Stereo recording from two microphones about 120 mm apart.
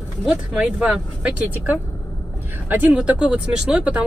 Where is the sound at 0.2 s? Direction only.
5° right (ahead or behind).